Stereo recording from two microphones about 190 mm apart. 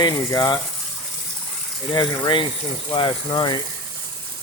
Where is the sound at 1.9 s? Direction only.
25° left (ahead or behind).